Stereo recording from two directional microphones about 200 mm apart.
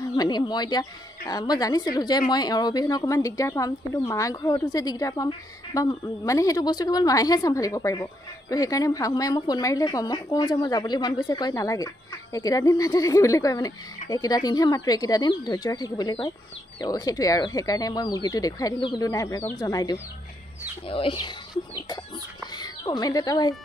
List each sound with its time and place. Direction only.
0.0 s a woman's voice: 20° left (ahead or behind)
22.4 s speech: 20° left (ahead or behind)